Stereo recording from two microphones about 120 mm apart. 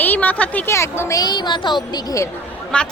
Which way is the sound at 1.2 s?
40° left (ahead or behind).